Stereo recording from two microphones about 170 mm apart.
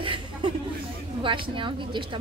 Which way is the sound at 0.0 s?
30° right (ahead or behind).